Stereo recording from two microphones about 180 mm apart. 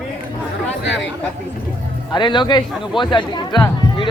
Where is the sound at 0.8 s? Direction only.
80° left.